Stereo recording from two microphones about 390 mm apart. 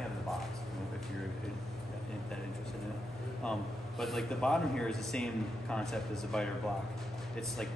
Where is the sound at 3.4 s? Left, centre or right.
Centre.